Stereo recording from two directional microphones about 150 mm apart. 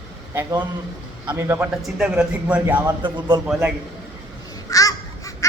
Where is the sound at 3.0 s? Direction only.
30° right (ahead or behind).